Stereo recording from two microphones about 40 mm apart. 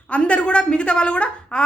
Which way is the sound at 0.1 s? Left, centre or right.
Left.